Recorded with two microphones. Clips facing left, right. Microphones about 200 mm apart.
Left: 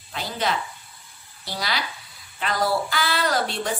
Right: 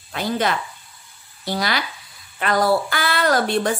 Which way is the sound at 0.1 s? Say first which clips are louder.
Right 5 dB; 55° right (ahead or behind).